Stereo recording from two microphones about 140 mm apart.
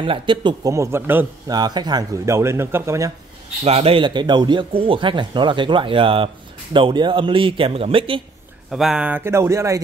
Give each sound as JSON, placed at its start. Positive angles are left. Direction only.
{"t": 0.0, "sound": "speech", "side_deg": -35}
{"t": 0.7, "sound": "speech", "side_deg": -15}
{"t": 1.5, "sound": "speech", "side_deg": -30}
{"t": 3.6, "sound": "speech", "side_deg": -45}
{"t": 8.6, "sound": "speech", "side_deg": 0}